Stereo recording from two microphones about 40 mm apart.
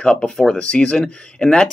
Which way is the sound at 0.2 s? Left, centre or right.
Centre.